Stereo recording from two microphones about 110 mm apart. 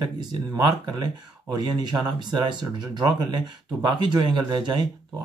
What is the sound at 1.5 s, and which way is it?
Speech, 40° right (ahead or behind).